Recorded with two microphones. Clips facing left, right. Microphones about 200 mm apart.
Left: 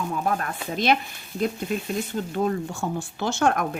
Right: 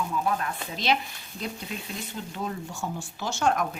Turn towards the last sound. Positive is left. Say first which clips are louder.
# left 3 dB
turn(degrees=55)  # may be behind; listen again after turning